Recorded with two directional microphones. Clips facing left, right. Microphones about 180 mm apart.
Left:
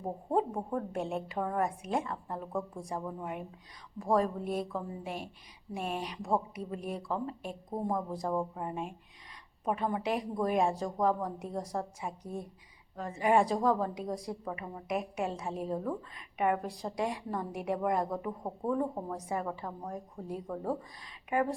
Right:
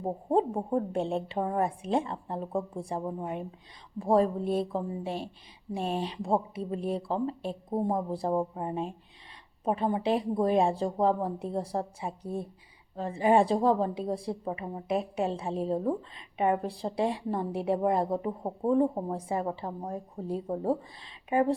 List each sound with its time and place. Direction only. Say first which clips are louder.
0.0 s a woman's voice: right 4 dB; 30° right (ahead or behind)